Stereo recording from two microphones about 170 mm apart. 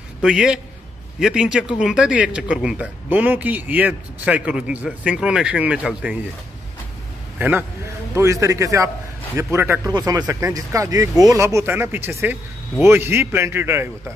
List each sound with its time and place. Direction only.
0.2 s a man's voice: 5° right (ahead or behind)
7.3 s a man's voice: 10° right (ahead or behind)